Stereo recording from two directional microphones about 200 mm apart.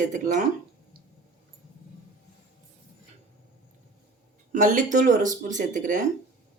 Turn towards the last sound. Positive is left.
turn(degrees=-40)  # may be behind; listen again after turning